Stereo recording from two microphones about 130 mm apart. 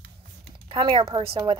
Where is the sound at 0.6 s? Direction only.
40° right (ahead or behind).